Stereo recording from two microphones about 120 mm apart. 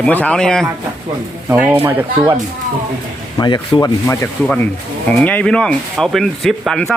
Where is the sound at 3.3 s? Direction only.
40° left (ahead or behind).